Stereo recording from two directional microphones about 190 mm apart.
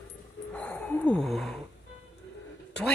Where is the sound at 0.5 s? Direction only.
5° left (ahead or behind).